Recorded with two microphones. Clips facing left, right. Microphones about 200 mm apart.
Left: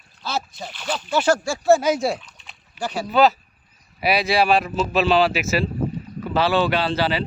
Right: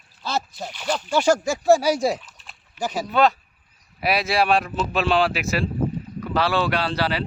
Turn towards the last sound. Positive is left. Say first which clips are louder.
# left 2 dB
turn(degrees=0)  # may be behind; listen again after turning